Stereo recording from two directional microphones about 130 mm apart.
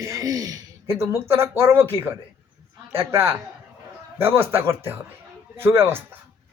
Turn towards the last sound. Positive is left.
turn(degrees=-20)  # may be behind; listen again after turning